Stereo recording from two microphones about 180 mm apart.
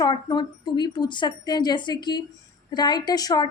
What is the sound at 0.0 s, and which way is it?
A woman's voice, 25° left (ahead or behind).